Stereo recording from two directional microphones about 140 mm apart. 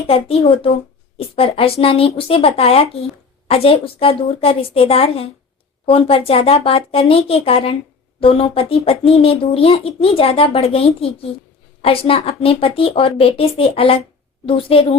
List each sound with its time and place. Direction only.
0.1 s a child's voice: 40° left (ahead or behind)